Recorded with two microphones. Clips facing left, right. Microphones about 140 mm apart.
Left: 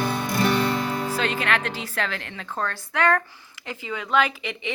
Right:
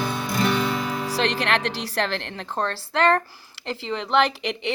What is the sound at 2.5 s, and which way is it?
Speech, 30° right (ahead or behind).